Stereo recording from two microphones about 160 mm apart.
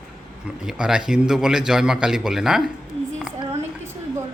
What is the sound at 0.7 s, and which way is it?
A man's voice, 5° right (ahead or behind).